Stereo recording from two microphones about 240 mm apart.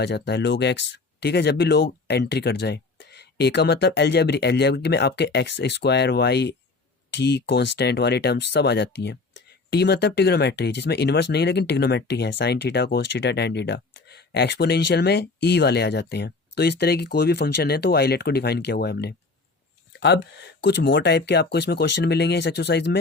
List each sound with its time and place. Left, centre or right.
0.0 s speech: left